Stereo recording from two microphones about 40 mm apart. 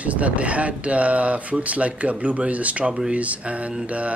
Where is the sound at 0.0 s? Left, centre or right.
Right.